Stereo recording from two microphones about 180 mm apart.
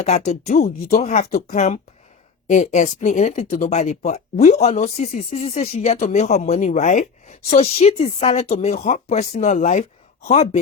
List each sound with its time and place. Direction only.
0.0 s speech: 40° left (ahead or behind)